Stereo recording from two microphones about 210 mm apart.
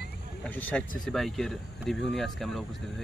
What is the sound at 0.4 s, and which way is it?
Speech, 5° left (ahead or behind).